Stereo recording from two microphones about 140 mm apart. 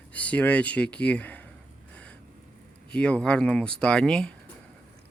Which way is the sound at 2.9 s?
10° left (ahead or behind).